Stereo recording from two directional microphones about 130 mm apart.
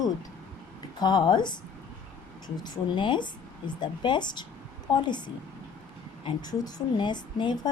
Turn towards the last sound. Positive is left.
turn(degrees=35)  # may be behind; listen again after turning